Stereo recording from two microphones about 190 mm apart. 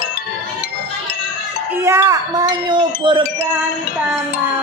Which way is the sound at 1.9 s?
15° right (ahead or behind).